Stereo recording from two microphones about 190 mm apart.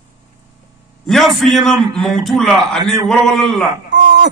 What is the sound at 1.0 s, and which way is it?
A man's voice, centre (ahead or behind).